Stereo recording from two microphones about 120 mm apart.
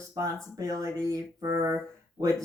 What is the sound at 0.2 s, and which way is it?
Speech, 30° right (ahead or behind).